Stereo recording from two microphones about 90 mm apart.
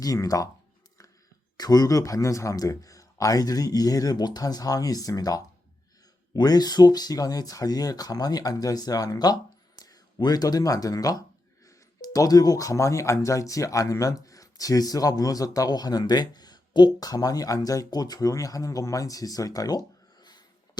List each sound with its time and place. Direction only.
0.0 s speech: 40° left (ahead or behind)
1.5 s speech: 45° left (ahead or behind)